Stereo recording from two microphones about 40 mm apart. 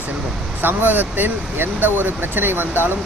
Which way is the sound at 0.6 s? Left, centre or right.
Right.